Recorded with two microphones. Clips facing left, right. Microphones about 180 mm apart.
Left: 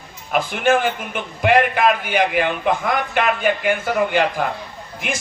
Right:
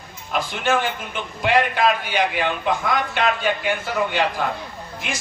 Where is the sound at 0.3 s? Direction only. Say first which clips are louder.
Left 4 dB; 55° left (ahead or behind).